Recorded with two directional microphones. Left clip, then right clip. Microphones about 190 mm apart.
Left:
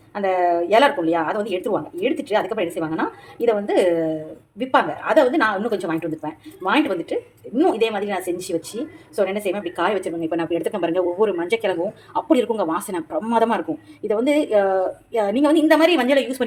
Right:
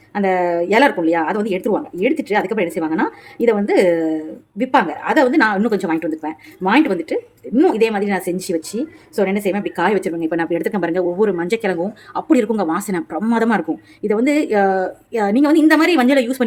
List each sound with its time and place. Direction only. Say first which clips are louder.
0.1 s a woman's voice: right 2 dB; 40° right (ahead or behind)